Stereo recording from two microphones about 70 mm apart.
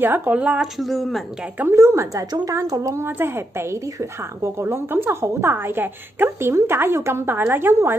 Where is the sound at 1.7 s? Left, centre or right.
Right.